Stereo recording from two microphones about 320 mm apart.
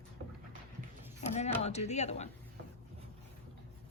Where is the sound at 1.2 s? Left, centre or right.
Left.